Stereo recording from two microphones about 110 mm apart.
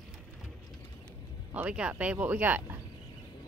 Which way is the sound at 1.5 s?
10° right (ahead or behind).